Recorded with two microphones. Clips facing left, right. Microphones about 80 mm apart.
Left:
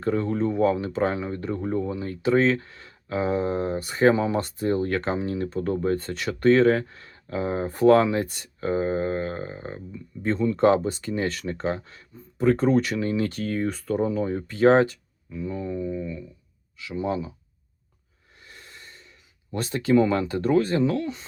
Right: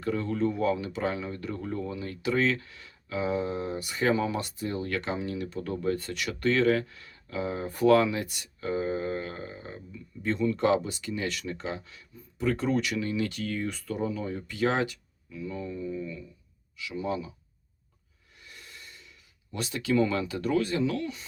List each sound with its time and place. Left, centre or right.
0.0 s speech: left
18.3 s gasp: left